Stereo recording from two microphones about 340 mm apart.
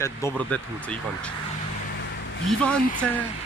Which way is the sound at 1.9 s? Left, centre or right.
Left.